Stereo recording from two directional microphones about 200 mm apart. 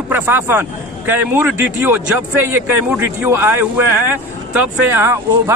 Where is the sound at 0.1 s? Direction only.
10° right (ahead or behind).